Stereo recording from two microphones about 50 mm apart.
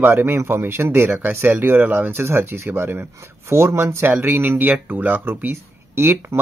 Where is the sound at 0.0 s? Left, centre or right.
Right.